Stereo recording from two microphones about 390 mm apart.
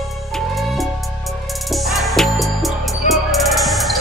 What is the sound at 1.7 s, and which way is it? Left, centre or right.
Music, centre.